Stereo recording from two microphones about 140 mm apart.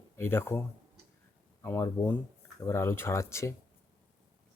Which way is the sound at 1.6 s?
15° left (ahead or behind).